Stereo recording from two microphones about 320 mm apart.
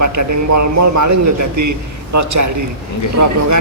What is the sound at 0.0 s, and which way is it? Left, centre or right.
A man's voice, right.